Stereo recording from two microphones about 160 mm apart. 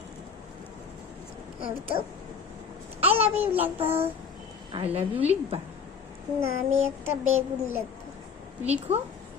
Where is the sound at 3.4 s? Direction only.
10° right (ahead or behind).